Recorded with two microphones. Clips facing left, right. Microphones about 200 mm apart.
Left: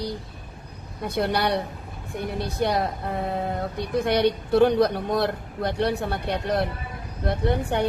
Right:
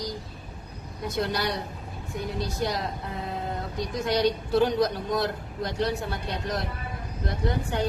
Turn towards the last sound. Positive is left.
turn(degrees=60)  # may be behind; listen again after turning